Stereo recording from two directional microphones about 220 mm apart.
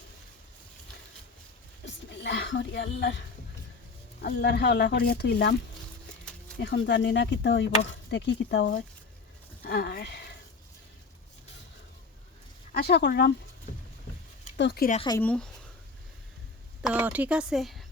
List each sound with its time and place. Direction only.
1.8 s a sound: 55° left (ahead or behind)
4.2 s speech: 45° left (ahead or behind)
6.6 s speech: 50° left (ahead or behind)
12.7 s speech: 50° left (ahead or behind)
13.7 s boat: 40° left (ahead or behind)
14.5 s speech: 50° left (ahead or behind)
15.2 s speech: 5° left (ahead or behind)
16.8 s speech: 5° right (ahead or behind)